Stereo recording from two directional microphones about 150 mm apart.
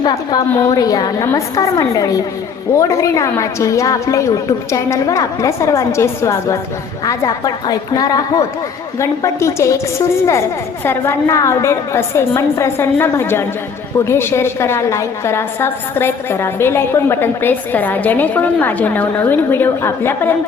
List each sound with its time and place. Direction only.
0.0 s a woman's voice: 30° left (ahead or behind)
10.8 s a woman's voice: 15° left (ahead or behind)